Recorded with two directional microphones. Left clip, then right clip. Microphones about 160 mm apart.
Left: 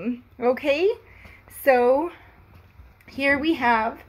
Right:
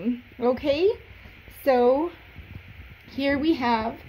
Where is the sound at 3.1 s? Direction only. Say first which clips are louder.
Left 2 dB; centre (ahead or behind).